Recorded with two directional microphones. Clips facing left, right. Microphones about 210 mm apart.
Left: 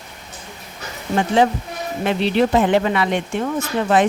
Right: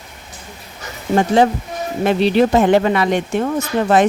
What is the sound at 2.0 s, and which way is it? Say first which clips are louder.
Speech: right 4 dB; 40° right (ahead or behind).